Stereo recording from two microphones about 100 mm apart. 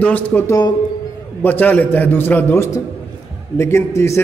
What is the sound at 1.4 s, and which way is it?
A man's voice, 15° left (ahead or behind).